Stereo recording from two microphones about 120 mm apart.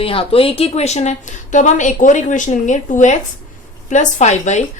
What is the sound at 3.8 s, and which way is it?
Speech, 75° left (ahead or behind).